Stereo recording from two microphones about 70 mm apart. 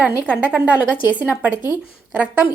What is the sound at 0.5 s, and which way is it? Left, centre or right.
A woman's voice, right.